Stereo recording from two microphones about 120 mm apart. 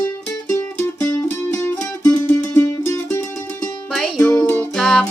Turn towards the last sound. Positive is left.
turn(degrees=5)  # may be behind; listen again after turning